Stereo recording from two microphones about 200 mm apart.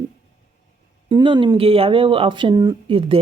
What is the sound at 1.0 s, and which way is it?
Speech, 25° right (ahead or behind).